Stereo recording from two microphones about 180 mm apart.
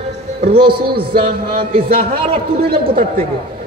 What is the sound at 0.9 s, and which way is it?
Speech, 30° right (ahead or behind).